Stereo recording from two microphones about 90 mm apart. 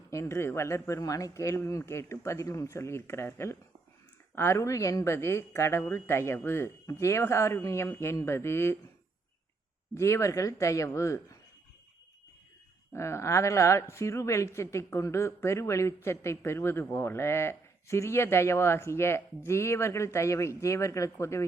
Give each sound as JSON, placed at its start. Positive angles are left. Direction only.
{"t": 0.1, "sound": "a woman's voice", "side_deg": 35}
{"t": 9.9, "sound": "a woman's voice", "side_deg": 30}
{"t": 12.9, "sound": "a woman's voice", "side_deg": 30}